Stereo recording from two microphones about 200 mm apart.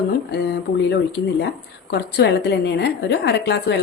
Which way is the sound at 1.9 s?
55° left (ahead or behind).